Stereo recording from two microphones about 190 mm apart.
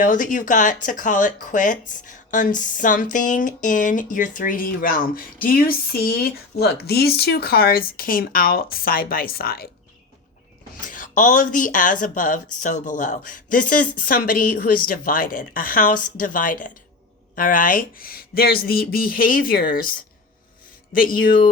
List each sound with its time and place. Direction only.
0.0 s speech: 45° left (ahead or behind)
10.8 s speech: 45° left (ahead or behind)